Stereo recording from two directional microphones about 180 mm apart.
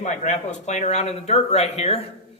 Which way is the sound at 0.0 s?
40° left (ahead or behind).